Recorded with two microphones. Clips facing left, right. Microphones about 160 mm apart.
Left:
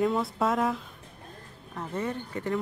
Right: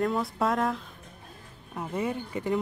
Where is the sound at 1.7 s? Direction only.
10° right (ahead or behind).